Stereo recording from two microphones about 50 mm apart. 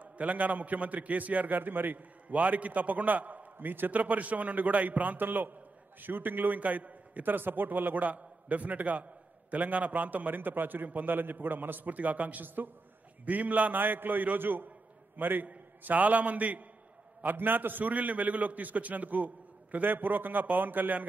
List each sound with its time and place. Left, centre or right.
0.0 s a man's voice: right